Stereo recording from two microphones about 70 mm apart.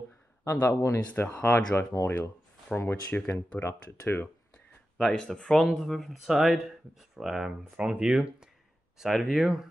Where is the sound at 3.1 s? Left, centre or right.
Centre.